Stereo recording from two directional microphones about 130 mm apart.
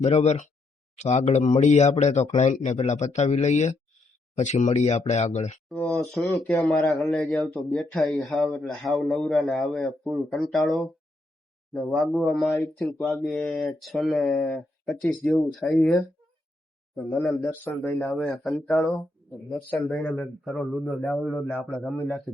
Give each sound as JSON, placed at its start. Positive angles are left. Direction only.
{"t": 0.0, "sound": "speech", "side_deg": 60}
{"t": 6.5, "sound": "a man's voice", "side_deg": 0}
{"t": 16.9, "sound": "a man's voice", "side_deg": 0}